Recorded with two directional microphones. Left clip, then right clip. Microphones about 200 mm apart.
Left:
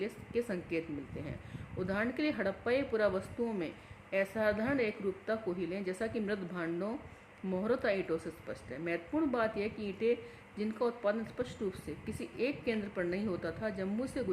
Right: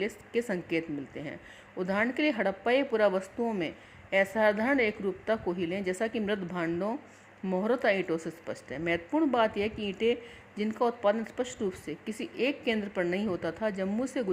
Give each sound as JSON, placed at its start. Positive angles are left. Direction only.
{"t": 0.0, "sound": "speech", "side_deg": -35}